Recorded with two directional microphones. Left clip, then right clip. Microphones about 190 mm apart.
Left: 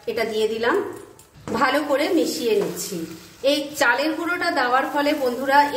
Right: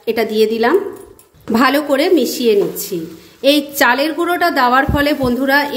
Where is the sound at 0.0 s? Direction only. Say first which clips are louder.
Right 8 dB; 55° right (ahead or behind).